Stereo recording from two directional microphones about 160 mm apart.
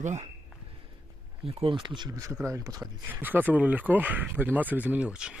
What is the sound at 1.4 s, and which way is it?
Speech, 35° right (ahead or behind).